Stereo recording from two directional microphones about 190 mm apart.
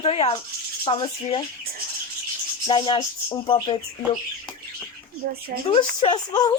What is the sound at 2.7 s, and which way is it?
Speech, 25° left (ahead or behind).